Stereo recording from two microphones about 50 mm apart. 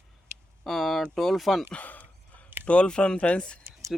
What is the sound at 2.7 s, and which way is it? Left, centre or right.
Speech, left.